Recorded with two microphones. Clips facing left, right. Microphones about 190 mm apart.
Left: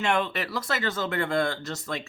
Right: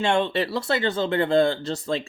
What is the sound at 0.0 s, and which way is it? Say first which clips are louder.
Speech: right 4 dB; 30° right (ahead or behind).